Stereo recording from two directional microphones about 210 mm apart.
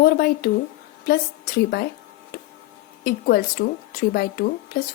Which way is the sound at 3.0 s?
45° left (ahead or behind).